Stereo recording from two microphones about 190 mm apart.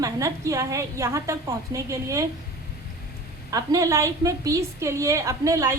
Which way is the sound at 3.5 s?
20° right (ahead or behind).